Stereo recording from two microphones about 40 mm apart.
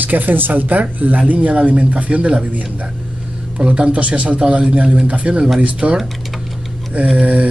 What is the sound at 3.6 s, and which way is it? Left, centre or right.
Speech, right.